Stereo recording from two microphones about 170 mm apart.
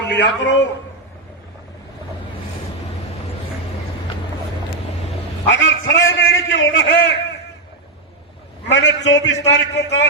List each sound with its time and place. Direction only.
0.1 s a man's voice: 85° left
5.5 s a man's voice: 90° left
8.7 s a man's voice: 90° left